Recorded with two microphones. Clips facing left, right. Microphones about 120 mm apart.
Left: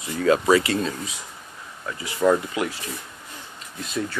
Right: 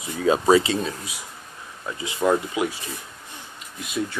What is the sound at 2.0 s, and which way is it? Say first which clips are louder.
Speech: left 1 dB; 20° right (ahead or behind).